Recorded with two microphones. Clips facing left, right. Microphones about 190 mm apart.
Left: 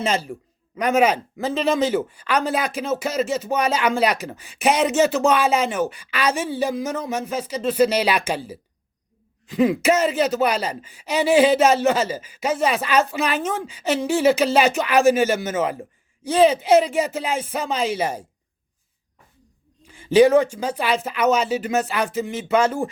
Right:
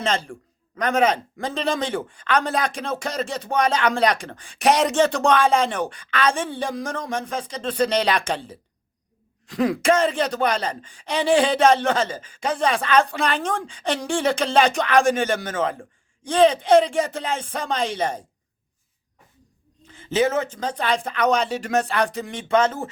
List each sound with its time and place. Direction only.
0.0 s speech: 10° left (ahead or behind)
19.8 s speech: 10° left (ahead or behind)